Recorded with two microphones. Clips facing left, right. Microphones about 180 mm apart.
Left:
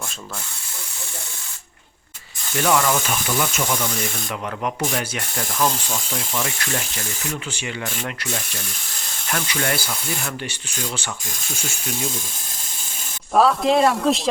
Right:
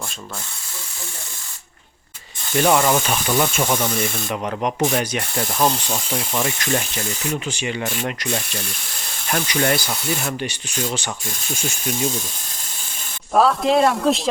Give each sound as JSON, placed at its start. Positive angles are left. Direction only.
{"t": 2.6, "sound": "speech", "side_deg": -25}
{"t": 5.3, "sound": "rub", "side_deg": -30}
{"t": 5.9, "sound": "speech", "side_deg": -20}
{"t": 13.3, "sound": "speech", "side_deg": 0}